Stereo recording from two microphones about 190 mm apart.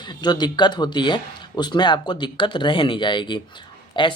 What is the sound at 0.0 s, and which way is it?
Speech, 25° left (ahead or behind).